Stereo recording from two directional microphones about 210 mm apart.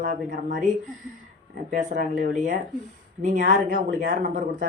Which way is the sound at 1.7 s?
40° right (ahead or behind).